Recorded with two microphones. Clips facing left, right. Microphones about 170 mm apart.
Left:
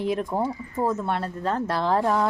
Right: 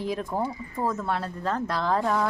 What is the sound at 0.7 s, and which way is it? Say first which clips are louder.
A woman's voice: left 3 dB; 25° left (ahead or behind).